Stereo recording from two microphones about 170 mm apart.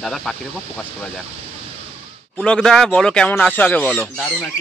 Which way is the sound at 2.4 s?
5° left (ahead or behind).